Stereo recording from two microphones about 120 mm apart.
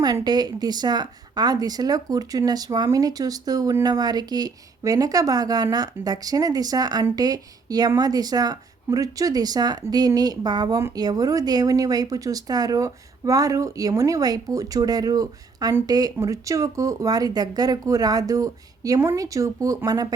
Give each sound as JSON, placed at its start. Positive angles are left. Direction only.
{"t": 0.0, "sound": "speech", "side_deg": -35}